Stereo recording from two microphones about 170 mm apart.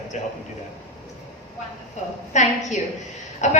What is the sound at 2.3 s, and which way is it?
A man's voice, 45° left (ahead or behind).